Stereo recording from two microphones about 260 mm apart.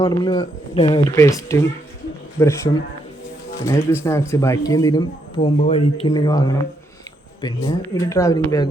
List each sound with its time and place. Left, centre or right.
0.0 s speech: centre
3.6 s speech: centre